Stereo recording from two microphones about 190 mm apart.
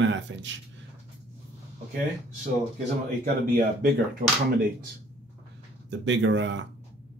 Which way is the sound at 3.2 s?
55° right (ahead or behind).